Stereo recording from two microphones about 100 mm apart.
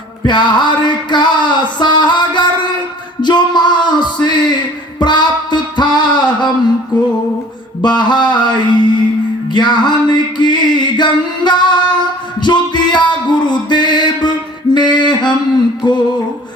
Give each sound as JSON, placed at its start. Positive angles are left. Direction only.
{"t": 0.3, "sound": "a sound", "side_deg": 50}
{"t": 7.8, "sound": "mantra", "side_deg": 50}
{"t": 9.5, "sound": "a sound", "side_deg": 50}
{"t": 12.4, "sound": "music", "side_deg": 50}
{"t": 13.4, "sound": "mantra", "side_deg": 50}
{"t": 15.8, "sound": "music", "side_deg": 50}